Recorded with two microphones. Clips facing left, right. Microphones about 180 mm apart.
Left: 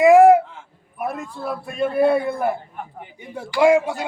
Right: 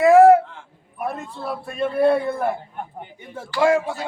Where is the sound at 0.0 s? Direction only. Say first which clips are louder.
Even; 15° left (ahead or behind).